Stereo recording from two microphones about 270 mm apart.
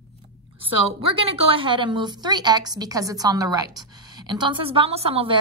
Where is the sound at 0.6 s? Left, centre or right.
Right.